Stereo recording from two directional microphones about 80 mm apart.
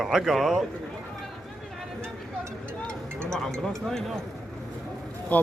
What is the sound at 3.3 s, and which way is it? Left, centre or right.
Speech, centre.